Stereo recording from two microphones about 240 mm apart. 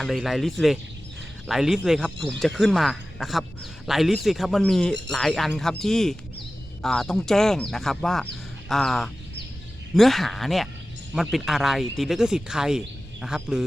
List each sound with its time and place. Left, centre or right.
0.0 s speech: centre